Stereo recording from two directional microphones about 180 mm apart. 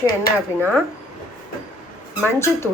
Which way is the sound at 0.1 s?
55° left (ahead or behind).